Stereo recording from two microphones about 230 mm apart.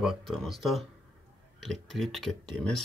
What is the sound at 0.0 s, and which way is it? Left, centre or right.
Speech, centre.